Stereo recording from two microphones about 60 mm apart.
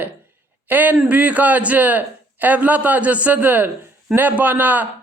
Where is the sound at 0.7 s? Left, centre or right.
Right.